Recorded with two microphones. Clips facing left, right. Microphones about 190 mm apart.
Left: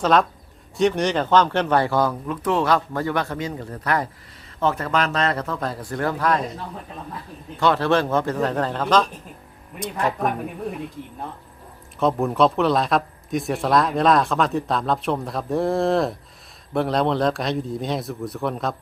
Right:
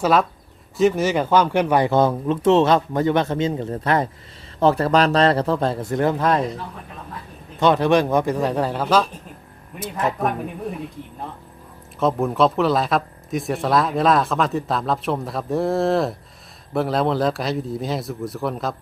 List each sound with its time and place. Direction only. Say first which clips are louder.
0.0 s speech: even; 5° right (ahead or behind); by 6.4 s 25° right (ahead or behind)
7.6 s speech: right 3 dB; 15° right (ahead or behind)
11.9 s speech: even; centre (ahead or behind)